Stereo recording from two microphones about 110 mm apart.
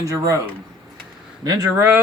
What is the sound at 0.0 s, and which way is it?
Speech, 30° right (ahead or behind).